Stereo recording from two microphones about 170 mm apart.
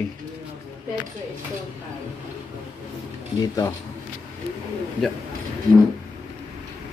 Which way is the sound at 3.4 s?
25° left (ahead or behind).